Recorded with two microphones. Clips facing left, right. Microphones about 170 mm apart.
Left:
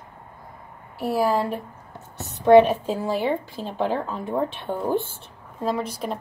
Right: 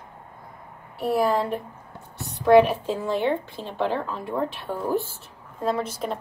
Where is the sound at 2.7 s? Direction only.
15° left (ahead or behind).